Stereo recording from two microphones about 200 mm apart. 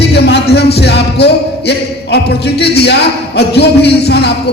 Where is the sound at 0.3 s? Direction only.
55° left (ahead or behind).